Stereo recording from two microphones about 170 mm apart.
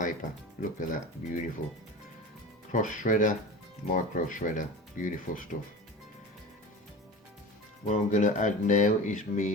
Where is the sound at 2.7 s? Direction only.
50° left (ahead or behind).